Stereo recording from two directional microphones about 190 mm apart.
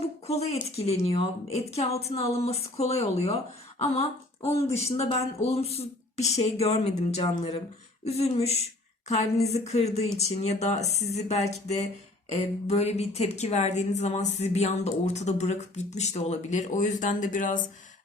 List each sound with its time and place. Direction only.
0.0 s a woman's voice: 35° left (ahead or behind)
4.7 s a woman's voice: 35° left (ahead or behind)